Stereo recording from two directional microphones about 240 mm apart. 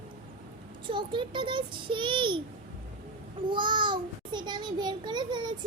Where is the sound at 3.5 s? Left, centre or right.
Centre.